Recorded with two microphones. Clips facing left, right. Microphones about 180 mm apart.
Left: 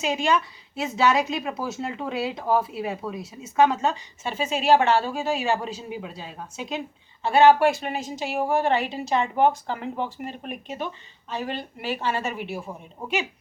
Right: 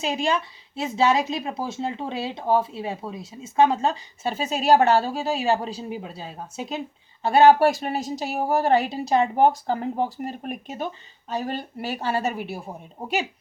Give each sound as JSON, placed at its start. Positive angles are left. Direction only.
{"t": 0.0, "sound": "a woman's voice", "side_deg": -35}